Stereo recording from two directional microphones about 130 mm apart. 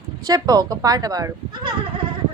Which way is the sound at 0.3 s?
30° right (ahead or behind).